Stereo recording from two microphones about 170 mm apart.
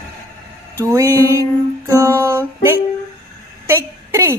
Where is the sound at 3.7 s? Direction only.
15° right (ahead or behind).